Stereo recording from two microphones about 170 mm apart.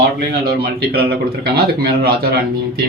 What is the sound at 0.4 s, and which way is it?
Speech, 65° right (ahead or behind).